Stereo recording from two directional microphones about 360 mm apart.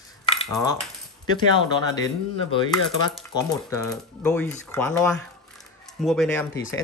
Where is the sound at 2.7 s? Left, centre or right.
Centre.